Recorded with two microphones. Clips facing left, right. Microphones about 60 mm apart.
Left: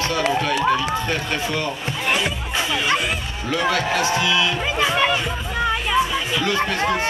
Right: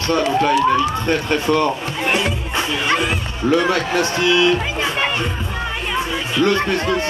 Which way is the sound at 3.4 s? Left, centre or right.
Right.